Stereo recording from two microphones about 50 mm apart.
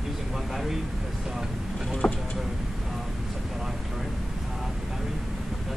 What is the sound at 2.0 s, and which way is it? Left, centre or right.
Speech, centre.